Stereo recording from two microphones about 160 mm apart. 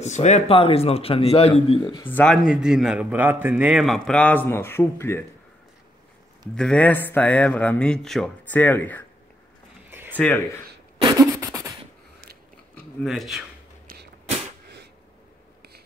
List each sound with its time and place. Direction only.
0.0 s speech: 45° left (ahead or behind)
1.8 s speech: 25° left (ahead or behind)
2.0 s speech: 10° left (ahead or behind)
2.4 s a man's voice: 5° right (ahead or behind); by 5.2 s 15° left (ahead or behind)
6.5 s speech: 5° left (ahead or behind)
9.8 s a sound: 15° right (ahead or behind)
10.1 s speech: 10° left (ahead or behind)
11.0 s beatboxing: 25° right (ahead or behind)
12.7 s speech: centre (ahead or behind)